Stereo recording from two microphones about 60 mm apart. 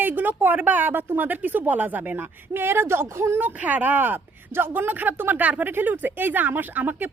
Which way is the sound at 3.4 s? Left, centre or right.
Right.